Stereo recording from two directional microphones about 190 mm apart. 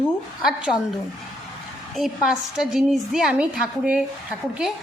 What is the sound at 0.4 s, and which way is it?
Speech, 5° right (ahead or behind).